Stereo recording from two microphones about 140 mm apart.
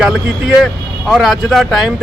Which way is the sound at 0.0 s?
5° right (ahead or behind).